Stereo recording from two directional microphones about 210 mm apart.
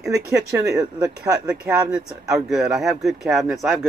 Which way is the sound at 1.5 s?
5° right (ahead or behind).